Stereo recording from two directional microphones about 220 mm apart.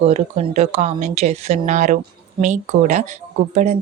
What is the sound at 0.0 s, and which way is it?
Speech, 30° right (ahead or behind).